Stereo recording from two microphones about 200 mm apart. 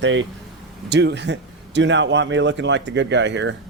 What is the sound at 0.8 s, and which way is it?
A man's voice, 60° right (ahead or behind).